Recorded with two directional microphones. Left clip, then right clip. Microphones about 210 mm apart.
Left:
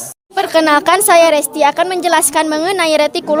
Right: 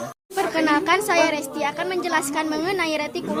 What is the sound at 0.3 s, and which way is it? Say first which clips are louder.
Speech: left 9 dB; 50° left (ahead or behind).